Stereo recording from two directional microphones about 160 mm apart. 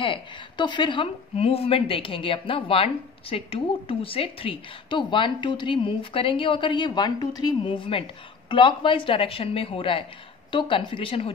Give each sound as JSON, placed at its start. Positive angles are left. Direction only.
{"t": 0.0, "sound": "a woman's voice", "side_deg": 30}